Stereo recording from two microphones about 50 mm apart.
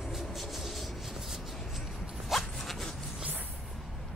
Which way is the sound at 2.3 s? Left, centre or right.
Centre.